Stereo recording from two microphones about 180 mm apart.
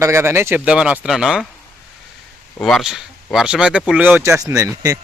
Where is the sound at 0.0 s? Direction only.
15° right (ahead or behind).